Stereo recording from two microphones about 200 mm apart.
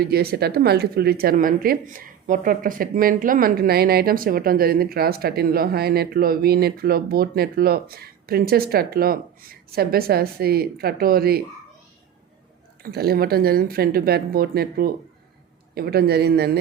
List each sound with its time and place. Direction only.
0.0 s speech: 50° right (ahead or behind)
12.8 s speech: 50° right (ahead or behind)